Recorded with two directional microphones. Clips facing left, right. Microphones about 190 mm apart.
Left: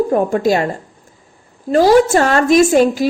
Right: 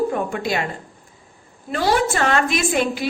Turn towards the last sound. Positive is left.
turn(degrees=40)  # may be behind; listen again after turning